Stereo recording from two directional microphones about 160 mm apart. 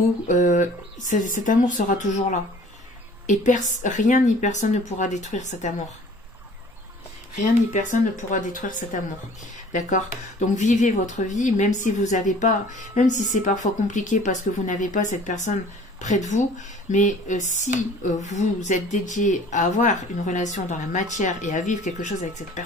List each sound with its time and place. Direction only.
0.3 s speech: 50° left (ahead or behind)
3.3 s speech: 50° left (ahead or behind)
7.3 s speech: 50° left (ahead or behind)